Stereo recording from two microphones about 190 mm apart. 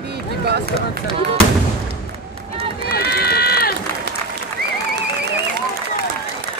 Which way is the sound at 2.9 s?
55° left (ahead or behind).